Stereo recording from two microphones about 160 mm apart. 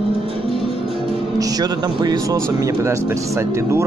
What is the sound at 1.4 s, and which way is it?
A man's voice, 25° right (ahead or behind).